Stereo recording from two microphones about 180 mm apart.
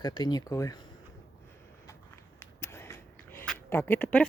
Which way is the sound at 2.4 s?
15° left (ahead or behind).